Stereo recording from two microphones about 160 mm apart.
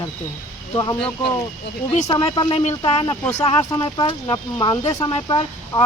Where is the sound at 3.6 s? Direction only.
20° left (ahead or behind).